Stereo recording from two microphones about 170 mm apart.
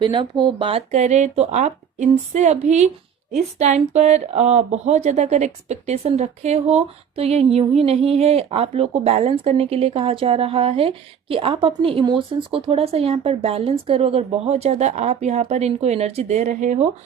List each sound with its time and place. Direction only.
0.0 s a woman's voice: 25° right (ahead or behind); by 16.9 s 45° right (ahead or behind)